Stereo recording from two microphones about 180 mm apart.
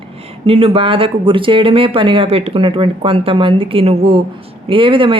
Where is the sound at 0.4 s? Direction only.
30° right (ahead or behind).